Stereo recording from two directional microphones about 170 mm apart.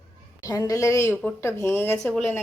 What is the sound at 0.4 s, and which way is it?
A woman's voice, 20° left (ahead or behind).